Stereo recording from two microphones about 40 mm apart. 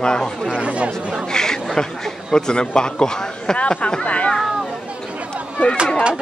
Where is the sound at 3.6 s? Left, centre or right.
Left.